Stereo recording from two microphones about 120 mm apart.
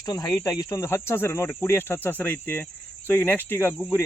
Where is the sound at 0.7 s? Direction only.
20° left (ahead or behind).